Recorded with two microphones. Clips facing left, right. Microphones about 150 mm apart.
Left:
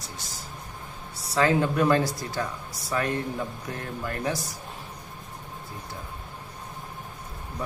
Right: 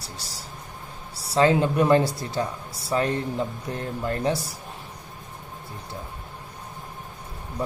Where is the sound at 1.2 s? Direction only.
30° right (ahead or behind).